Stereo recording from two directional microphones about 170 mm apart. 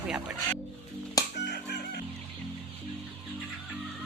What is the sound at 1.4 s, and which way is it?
Music, 80° left.